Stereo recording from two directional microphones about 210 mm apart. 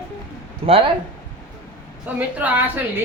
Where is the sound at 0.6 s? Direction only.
25° right (ahead or behind).